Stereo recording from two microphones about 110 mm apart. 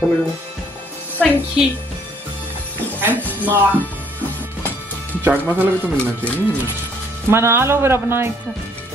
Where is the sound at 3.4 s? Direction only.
15° right (ahead or behind).